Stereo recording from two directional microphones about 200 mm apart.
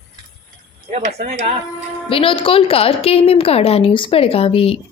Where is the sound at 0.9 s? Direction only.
35° right (ahead or behind).